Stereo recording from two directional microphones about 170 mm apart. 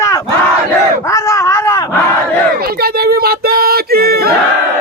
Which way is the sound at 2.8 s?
65° right (ahead or behind).